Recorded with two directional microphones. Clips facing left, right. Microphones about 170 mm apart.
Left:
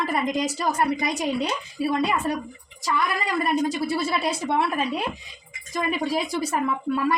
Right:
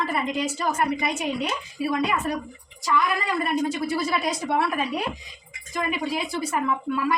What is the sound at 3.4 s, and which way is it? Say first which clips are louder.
A woman's voice: left 3 dB; 35° left (ahead or behind).